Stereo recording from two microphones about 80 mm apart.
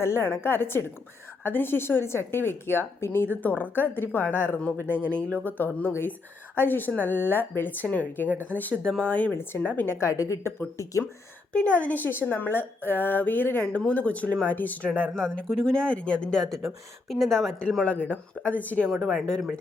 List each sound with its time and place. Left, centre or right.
0.0 s a woman's voice: left
10.1 s speech: left
11.5 s a woman's voice: centre
17.8 s a woman's voice: left
18.9 s speech: centre